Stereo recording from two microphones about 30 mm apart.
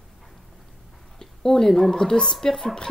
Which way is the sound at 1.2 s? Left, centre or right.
Centre.